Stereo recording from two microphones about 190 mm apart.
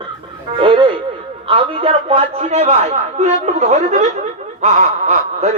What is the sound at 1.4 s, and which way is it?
A man's voice, 25° right (ahead or behind).